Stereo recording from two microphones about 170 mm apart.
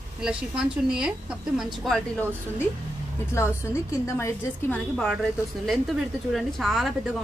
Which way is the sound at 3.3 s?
15° left (ahead or behind).